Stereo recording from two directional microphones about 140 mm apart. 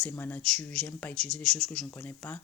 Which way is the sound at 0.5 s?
5° left (ahead or behind).